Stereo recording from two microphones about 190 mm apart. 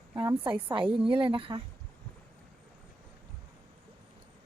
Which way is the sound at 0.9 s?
25° right (ahead or behind).